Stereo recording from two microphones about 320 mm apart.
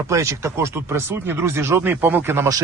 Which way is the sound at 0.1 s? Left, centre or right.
Centre.